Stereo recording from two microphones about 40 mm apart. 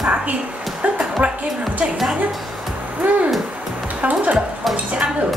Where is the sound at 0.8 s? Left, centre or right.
Right.